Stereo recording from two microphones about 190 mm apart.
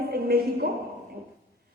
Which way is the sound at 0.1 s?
55° right (ahead or behind).